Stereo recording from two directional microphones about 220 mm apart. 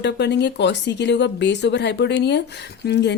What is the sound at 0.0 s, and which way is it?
A woman's voice, 50° left (ahead or behind).